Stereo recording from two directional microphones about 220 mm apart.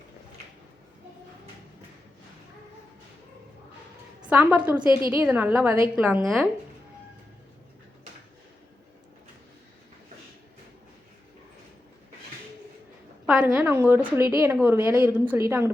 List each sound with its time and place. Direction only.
4.3 s a woman's voice: 10° right (ahead or behind)
4.9 s a woman's voice: 20° left (ahead or behind)
5.1 s a woman's voice: 5° right (ahead or behind)
13.2 s a woman's voice: 5° right (ahead or behind)